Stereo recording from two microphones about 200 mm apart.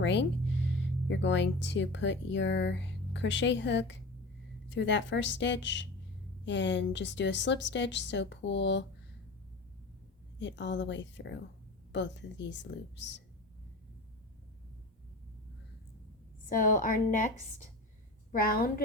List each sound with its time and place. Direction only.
0.0 s a woman's voice: 65° left (ahead or behind)
10.4 s a woman's voice: 60° left (ahead or behind)
16.5 s a woman's voice: 40° left (ahead or behind)